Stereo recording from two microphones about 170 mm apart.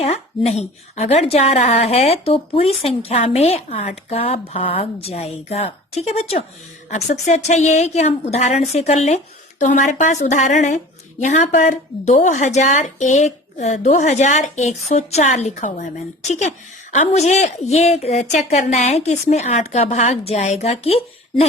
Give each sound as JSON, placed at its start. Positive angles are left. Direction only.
{"t": 0.0, "sound": "a woman's voice", "side_deg": 40}